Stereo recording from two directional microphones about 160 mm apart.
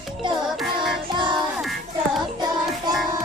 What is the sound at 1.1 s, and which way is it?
Music, 30° right (ahead or behind).